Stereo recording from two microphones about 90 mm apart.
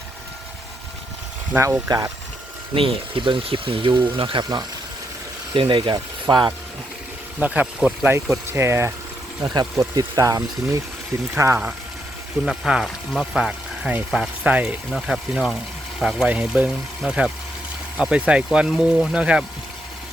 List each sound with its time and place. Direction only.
1.5 s speech: 25° right (ahead or behind)
1.9 s speech: 55° right (ahead or behind)
2.7 s speech: 70° right (ahead or behind)
5.5 s speech: 65° right (ahead or behind)
7.3 s speech: 15° right (ahead or behind)
8.4 s speech: 30° right (ahead or behind)
9.4 s speech: 45° right (ahead or behind)
12.5 s speech: 5° right (ahead or behind)